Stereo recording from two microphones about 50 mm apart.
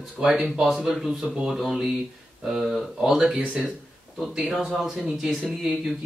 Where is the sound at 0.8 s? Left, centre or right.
Centre.